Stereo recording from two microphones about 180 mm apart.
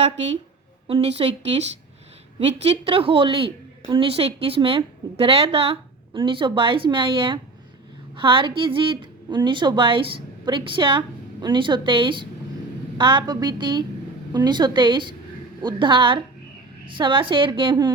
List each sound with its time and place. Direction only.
1.0 s a woman's voice: 35° right (ahead or behind)